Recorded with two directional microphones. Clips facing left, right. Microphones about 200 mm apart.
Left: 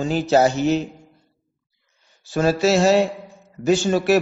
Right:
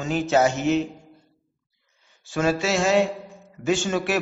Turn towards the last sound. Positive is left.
turn(degrees=40)  # may be behind; listen again after turning